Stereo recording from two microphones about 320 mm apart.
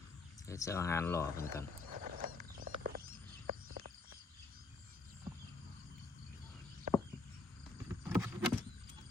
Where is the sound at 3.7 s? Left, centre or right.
Right.